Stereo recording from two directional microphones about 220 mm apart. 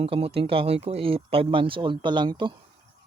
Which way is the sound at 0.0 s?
25° right (ahead or behind).